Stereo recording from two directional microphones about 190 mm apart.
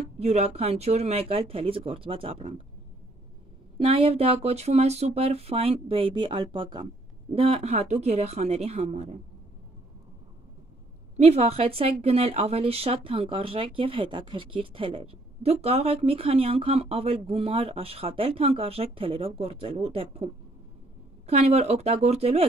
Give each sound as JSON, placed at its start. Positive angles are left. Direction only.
{"t": 0.2, "sound": "a woman's voice", "side_deg": -35}
{"t": 3.7, "sound": "a woman's voice", "side_deg": -30}
{"t": 11.1, "sound": "a woman's voice", "side_deg": -35}
{"t": 21.3, "sound": "a woman's voice", "side_deg": -35}